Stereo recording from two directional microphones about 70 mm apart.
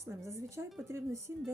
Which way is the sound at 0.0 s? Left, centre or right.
Right.